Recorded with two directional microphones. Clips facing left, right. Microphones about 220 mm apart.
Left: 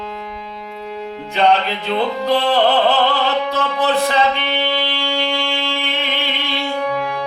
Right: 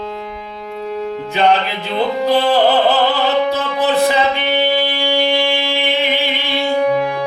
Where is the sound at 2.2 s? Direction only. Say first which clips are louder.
Right 3 dB; 5° right (ahead or behind).